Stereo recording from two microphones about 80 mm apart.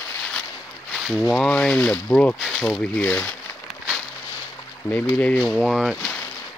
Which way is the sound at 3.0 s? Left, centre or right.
Centre.